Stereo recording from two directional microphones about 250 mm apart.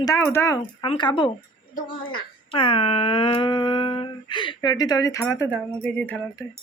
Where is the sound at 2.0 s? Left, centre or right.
Left.